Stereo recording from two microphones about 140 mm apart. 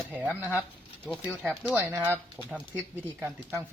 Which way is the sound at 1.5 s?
10° right (ahead or behind).